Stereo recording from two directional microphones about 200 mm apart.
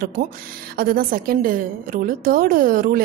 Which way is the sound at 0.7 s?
50° right (ahead or behind).